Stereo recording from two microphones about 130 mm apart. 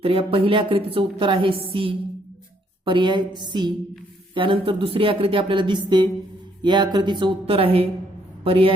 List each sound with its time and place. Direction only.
0.0 s speech: 45° right (ahead or behind)